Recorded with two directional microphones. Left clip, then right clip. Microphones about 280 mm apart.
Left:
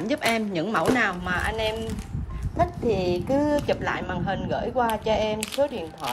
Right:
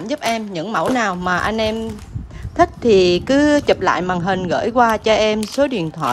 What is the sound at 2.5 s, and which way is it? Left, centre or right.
Speech, right.